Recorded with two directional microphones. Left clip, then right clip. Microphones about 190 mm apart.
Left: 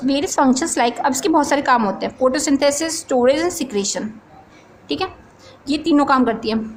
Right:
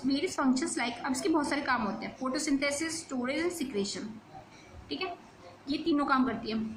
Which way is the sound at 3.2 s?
50° left (ahead or behind).